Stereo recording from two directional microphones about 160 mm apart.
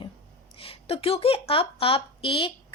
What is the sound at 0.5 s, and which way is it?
Speech, 35° left (ahead or behind).